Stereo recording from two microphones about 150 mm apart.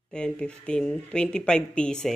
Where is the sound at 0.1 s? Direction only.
5° left (ahead or behind).